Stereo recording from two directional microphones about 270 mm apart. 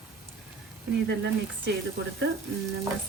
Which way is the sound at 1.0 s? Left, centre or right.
Right.